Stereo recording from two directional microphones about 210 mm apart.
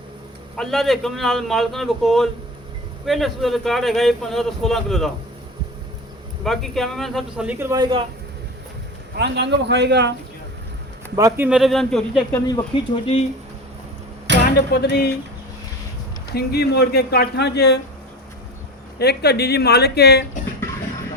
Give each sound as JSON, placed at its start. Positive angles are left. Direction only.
{"t": 0.5, "sound": "speech", "side_deg": 0}
{"t": 6.4, "sound": "speech", "side_deg": 0}
{"t": 9.1, "sound": "a man's voice", "side_deg": -55}
{"t": 11.2, "sound": "speech", "side_deg": -15}
{"t": 11.4, "sound": "speech", "side_deg": 0}
{"t": 12.5, "sound": "speech", "side_deg": 20}
{"t": 14.3, "sound": "a sound", "side_deg": -55}
{"t": 14.7, "sound": "speech", "side_deg": 50}
{"t": 16.3, "sound": "speech", "side_deg": 50}
{"t": 18.9, "sound": "speech", "side_deg": 50}